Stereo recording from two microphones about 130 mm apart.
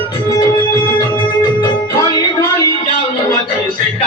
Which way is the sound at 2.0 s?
30° left (ahead or behind).